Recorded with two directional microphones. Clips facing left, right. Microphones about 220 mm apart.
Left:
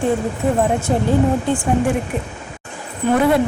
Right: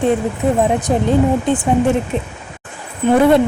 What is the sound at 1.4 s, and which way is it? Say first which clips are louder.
Speech: right 3 dB; 20° right (ahead or behind).